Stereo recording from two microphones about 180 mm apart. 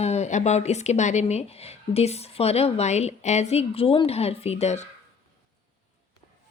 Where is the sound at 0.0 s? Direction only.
35° left (ahead or behind).